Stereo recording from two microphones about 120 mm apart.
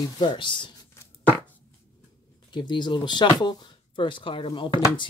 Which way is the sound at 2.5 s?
40° left (ahead or behind).